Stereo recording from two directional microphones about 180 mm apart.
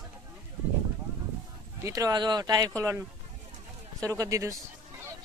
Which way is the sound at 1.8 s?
20° right (ahead or behind).